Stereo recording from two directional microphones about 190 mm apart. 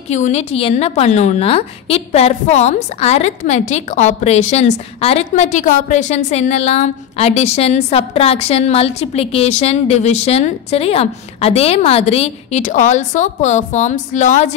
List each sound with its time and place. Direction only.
0.1 s a woman's voice: 35° left (ahead or behind)